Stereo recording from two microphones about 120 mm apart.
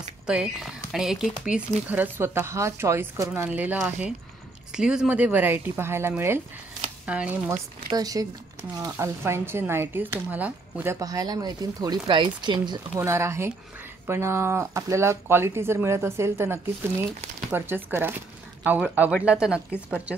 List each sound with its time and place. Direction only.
0.3 s speech: 5° right (ahead or behind)
1.9 s speech: 15° right (ahead or behind)
7.9 s speech: 30° right (ahead or behind)
8.9 s speech: 20° right (ahead or behind)
11.0 s speech: 30° right (ahead or behind)
12.9 s a woman's voice: 20° right (ahead or behind)